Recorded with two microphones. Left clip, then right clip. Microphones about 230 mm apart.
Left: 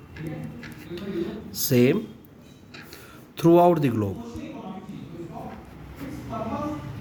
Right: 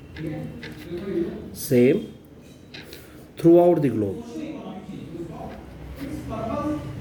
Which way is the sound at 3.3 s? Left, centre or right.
Left.